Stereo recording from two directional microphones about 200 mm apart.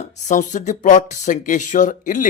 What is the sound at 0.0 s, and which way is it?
Speech, 35° left (ahead or behind).